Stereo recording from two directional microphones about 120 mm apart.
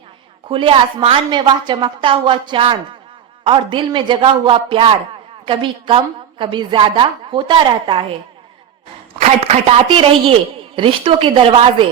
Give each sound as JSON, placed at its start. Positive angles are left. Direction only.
{"t": 0.4, "sound": "a woman's voice", "side_deg": -45}
{"t": 9.1, "sound": "a woman's voice", "side_deg": -60}